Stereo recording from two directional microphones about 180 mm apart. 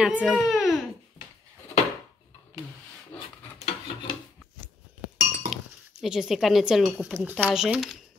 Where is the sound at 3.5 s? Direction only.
35° left (ahead or behind).